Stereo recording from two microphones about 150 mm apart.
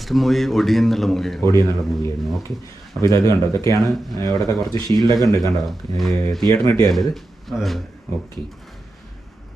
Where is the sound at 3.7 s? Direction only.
25° right (ahead or behind).